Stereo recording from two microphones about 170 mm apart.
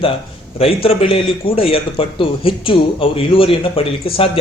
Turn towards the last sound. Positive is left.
turn(degrees=35)  # may be behind; listen again after turning